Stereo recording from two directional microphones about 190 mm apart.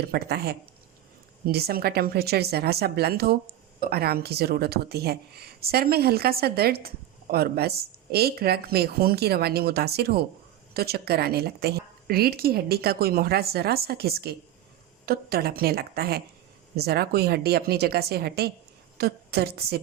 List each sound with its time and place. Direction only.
0.1 s a woman's voice: 55° right (ahead or behind)